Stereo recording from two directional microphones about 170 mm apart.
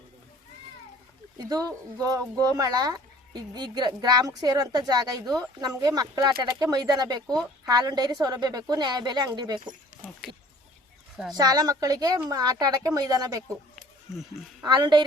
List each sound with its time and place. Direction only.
1.4 s speech: 25° right (ahead or behind)
11.3 s speech: 25° right (ahead or behind)
14.6 s speech: 25° right (ahead or behind)